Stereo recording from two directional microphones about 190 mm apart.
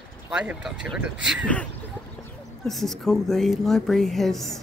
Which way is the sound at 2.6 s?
Centre (ahead or behind).